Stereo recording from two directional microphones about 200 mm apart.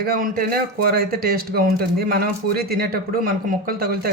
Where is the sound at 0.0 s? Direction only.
45° right (ahead or behind).